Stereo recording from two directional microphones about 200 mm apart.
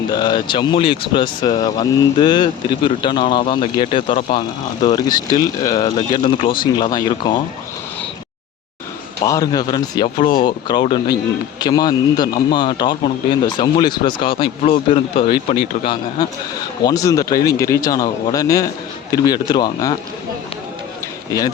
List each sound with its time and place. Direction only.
0.1 s speech: 20° left (ahead or behind)
9.2 s a man's voice: 20° left (ahead or behind)